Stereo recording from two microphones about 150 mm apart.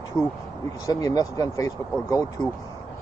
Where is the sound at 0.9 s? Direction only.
25° left (ahead or behind).